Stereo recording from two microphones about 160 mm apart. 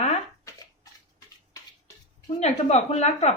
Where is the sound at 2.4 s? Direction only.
45° left (ahead or behind).